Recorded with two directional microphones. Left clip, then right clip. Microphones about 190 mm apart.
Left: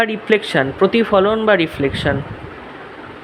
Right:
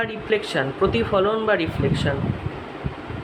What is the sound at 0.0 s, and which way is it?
Speech, 45° left (ahead or behind).